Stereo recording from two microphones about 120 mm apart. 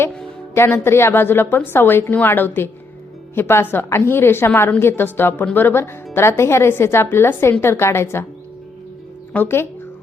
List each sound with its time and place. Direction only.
0.5 s a woman's voice: 20° left (ahead or behind)
9.3 s a woman's voice: 15° left (ahead or behind)